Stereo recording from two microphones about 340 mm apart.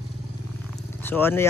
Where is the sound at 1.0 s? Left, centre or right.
Centre.